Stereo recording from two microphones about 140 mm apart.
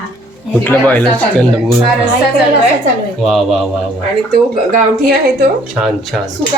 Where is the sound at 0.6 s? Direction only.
15° left (ahead or behind).